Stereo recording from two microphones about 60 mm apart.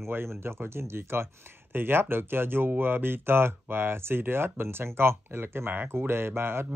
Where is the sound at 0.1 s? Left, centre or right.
Right.